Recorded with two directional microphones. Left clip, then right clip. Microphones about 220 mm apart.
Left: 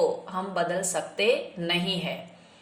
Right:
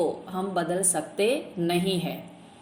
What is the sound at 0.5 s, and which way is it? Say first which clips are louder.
Speech: even; 25° right (ahead or behind).